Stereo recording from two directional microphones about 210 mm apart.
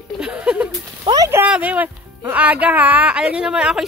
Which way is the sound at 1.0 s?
15° right (ahead or behind).